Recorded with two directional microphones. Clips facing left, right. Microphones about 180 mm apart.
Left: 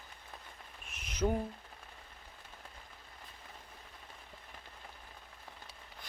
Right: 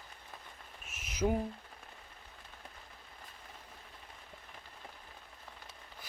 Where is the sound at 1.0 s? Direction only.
5° right (ahead or behind).